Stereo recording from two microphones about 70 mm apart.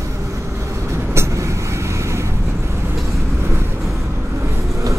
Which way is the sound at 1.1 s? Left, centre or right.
Right.